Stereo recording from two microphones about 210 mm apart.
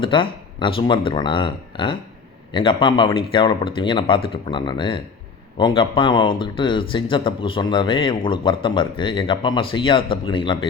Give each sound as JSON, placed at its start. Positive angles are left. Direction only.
{"t": 0.0, "sound": "speech", "side_deg": 25}